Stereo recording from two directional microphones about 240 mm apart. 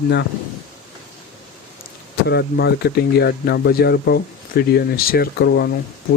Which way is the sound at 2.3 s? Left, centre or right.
Left.